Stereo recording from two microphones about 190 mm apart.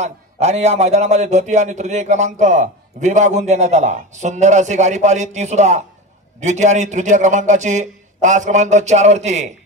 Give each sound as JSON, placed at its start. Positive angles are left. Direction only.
{"t": 0.0, "sound": "a man's voice", "side_deg": -35}